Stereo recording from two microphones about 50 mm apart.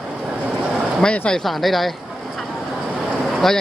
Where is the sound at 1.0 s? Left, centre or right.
Left.